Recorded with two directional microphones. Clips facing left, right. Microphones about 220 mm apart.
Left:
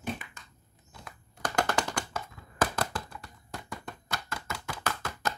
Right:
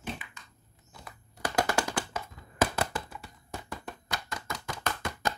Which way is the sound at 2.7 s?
10° right (ahead or behind).